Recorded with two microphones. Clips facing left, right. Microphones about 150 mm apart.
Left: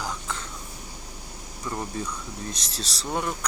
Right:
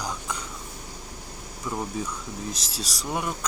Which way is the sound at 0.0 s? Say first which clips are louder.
Even; 15° right (ahead or behind).